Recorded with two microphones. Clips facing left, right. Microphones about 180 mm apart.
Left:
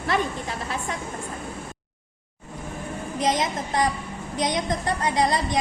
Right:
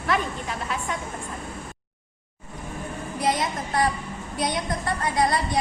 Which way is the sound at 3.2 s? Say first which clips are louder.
Left 1 dB; 20° left (ahead or behind).